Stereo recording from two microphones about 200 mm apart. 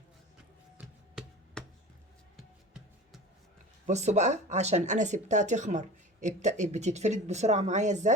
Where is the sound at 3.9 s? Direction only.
35° right (ahead or behind).